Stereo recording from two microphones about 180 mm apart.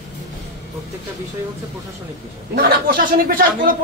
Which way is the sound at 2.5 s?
55° right (ahead or behind).